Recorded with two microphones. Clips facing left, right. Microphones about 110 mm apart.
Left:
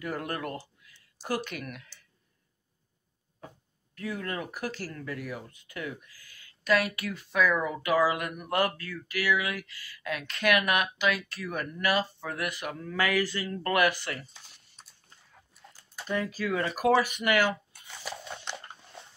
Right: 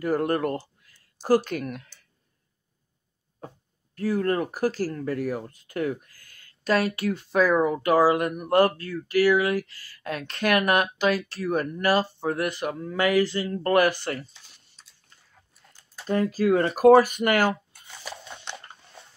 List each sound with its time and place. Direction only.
0.0 s speech: 35° right (ahead or behind)
3.3 s speech: 35° right (ahead or behind)
6.7 s speech: 35° right (ahead or behind)
16.1 s speech: 40° right (ahead or behind)
18.1 s a sound: centre (ahead or behind)